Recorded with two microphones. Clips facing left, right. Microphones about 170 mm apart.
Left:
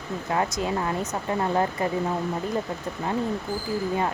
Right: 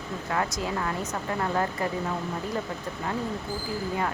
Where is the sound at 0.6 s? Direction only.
25° left (ahead or behind).